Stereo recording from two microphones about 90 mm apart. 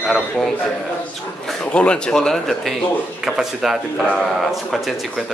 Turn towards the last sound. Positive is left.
turn(degrees=-5)  # may be behind; listen again after turning